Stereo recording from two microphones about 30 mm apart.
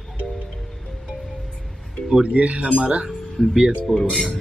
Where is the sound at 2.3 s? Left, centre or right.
Right.